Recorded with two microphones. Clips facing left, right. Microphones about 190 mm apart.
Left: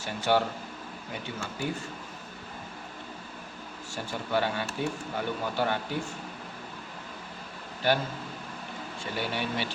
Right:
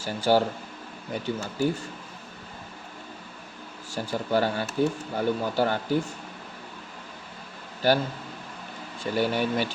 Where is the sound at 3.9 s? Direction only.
40° right (ahead or behind).